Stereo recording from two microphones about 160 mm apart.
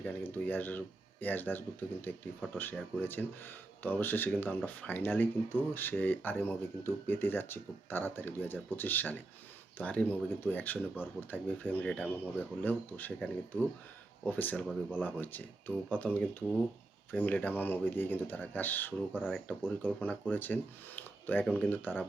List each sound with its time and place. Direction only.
0.0 s speech: 10° left (ahead or behind)